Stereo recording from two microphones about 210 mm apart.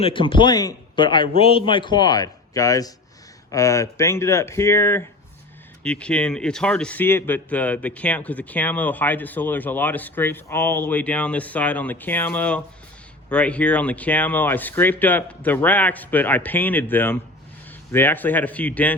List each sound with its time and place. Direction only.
0.0 s a man's voice: 25° left (ahead or behind); by 18.9 s 5° left (ahead or behind)